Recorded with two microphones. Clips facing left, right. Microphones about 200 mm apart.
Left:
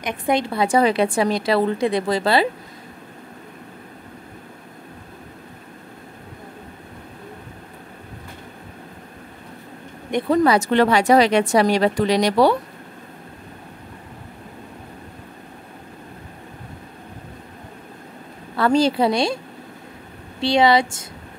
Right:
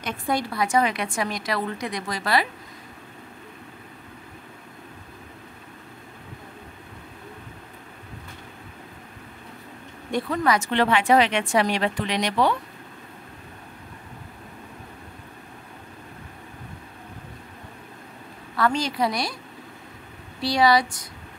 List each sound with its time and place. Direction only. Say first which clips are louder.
0.0 s a woman's voice: left 5 dB; 20° left (ahead or behind)
10.3 s speech: left 8 dB; 30° left (ahead or behind)
18.6 s a woman's voice: left 6 dB; 30° left (ahead or behind)